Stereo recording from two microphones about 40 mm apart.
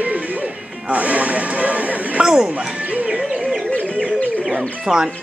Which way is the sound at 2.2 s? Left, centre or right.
Centre.